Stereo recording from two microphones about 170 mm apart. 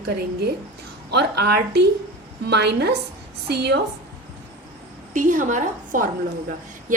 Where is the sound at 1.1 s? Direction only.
70° right (ahead or behind).